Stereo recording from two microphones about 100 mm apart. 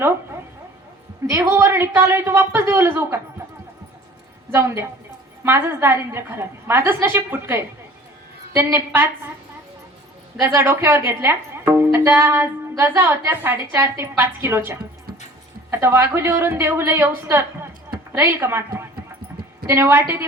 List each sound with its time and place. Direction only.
1.3 s a woman's voice: 30° right (ahead or behind)
4.5 s a woman's voice: 25° right (ahead or behind)
10.4 s a woman's voice: 25° right (ahead or behind)